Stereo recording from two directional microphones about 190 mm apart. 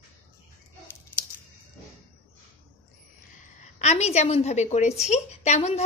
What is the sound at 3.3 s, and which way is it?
A woman's voice, 40° left (ahead or behind).